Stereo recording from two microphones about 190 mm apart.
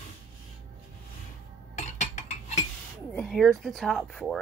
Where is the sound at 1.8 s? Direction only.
40° left (ahead or behind).